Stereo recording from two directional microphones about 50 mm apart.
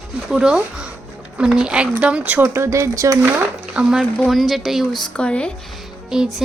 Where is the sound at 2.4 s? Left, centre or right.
Right.